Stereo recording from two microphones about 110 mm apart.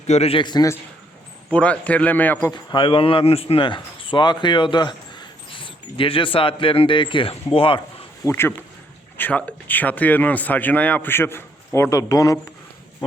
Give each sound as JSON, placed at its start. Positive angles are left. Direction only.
{"t": 0.1, "sound": "a man's voice", "side_deg": 65}
{"t": 0.4, "sound": "a man's voice", "side_deg": 40}
{"t": 1.5, "sound": "speech", "side_deg": 10}
{"t": 2.5, "sound": "a man's voice", "side_deg": 45}
{"t": 8.2, "sound": "speech", "side_deg": 25}